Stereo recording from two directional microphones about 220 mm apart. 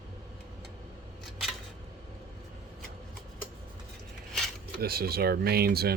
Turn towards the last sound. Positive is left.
turn(degrees=-45)  # may be behind; listen again after turning